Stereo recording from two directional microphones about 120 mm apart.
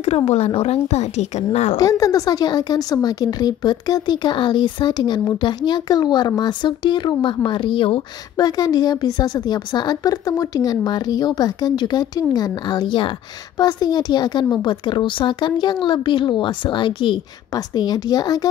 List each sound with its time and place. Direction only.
0.0 s a woman's voice: 60° left (ahead or behind)
1.8 s a woman's voice: 30° left (ahead or behind); by 8.0 s 45° left (ahead or behind)
8.4 s a woman's voice: 30° left (ahead or behind)